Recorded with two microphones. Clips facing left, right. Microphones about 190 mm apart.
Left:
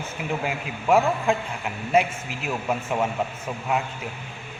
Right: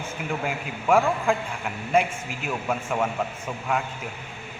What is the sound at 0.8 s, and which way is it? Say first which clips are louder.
Speech: left 1 dB; 5° left (ahead or behind).